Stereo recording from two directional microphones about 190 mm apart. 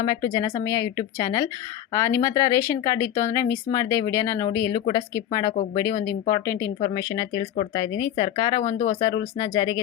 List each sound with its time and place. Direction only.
0.0 s a woman's voice: 20° left (ahead or behind)